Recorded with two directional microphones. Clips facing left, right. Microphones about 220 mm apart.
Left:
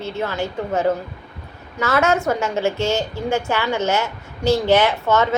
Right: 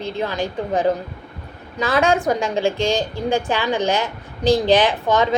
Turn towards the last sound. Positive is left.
turn(degrees=-15)  # may be behind; listen again after turning